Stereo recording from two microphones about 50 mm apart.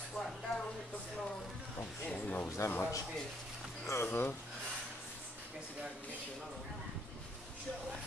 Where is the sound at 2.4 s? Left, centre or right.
Left.